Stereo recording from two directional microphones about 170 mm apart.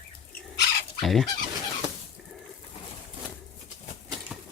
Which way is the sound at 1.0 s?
Centre (ahead or behind).